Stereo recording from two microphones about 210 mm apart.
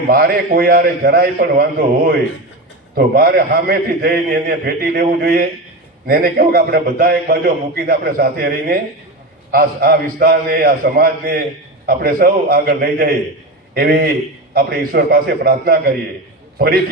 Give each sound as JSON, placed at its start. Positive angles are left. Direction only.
{"t": 0.1, "sound": "a man's voice", "side_deg": -45}
{"t": 2.9, "sound": "a man's voice", "side_deg": -45}